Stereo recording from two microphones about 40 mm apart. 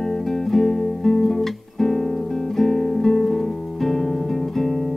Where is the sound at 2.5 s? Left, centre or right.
Centre.